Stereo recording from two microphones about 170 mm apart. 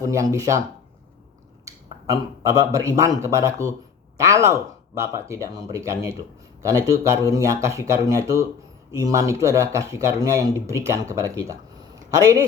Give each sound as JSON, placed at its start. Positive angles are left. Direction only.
{"t": 0.0, "sound": "speech", "side_deg": -20}
{"t": 1.6, "sound": "speech", "side_deg": -20}